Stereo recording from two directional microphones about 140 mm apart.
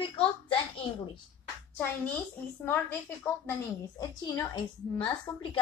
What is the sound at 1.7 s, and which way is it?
A woman's voice, 15° left (ahead or behind).